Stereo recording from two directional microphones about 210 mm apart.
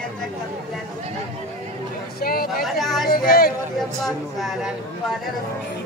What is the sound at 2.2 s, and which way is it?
Speech, 45° left (ahead or behind).